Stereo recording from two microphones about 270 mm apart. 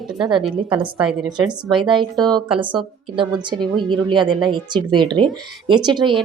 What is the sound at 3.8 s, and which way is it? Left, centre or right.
Speech, centre.